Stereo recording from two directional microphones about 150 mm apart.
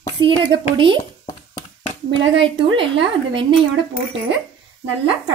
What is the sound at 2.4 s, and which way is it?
Speech, 35° right (ahead or behind).